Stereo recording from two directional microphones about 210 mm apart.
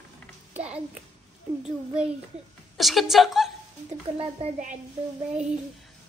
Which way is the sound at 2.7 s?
Centre (ahead or behind).